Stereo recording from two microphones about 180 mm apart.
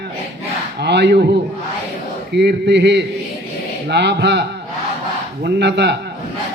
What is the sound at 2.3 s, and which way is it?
Speech, 70° right (ahead or behind).